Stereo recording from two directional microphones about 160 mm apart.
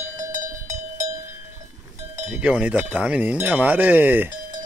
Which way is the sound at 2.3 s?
5° right (ahead or behind).